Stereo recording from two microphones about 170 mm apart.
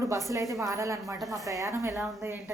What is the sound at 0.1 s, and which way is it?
A woman's voice, 20° right (ahead or behind).